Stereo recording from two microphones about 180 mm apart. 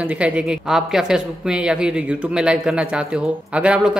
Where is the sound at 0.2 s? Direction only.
5° right (ahead or behind).